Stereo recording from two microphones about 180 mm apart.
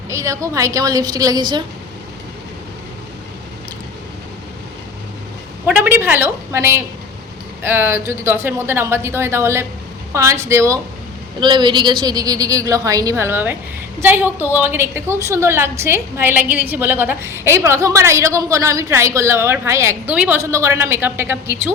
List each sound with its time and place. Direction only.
0.1 s a woman's voice: 15° right (ahead or behind)
5.6 s a woman's voice: 10° right (ahead or behind)